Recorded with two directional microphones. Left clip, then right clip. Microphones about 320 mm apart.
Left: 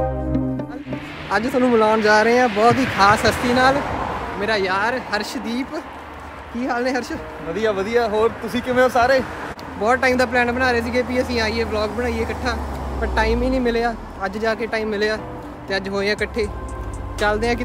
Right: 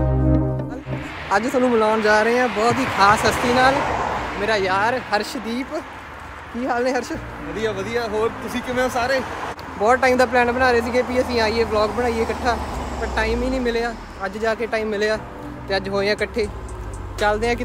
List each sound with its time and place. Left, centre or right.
1.4 s speech: centre
2.0 s speech: centre
2.7 s speech: centre
3.0 s speech: centre
3.7 s speech: right
4.4 s speech: centre
7.5 s speech: centre
9.8 s speech: centre
13.1 s speech: centre